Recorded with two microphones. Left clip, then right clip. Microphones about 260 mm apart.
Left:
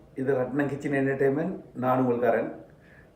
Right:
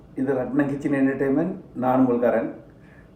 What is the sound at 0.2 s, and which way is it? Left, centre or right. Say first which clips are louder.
Speech: right 3 dB; centre.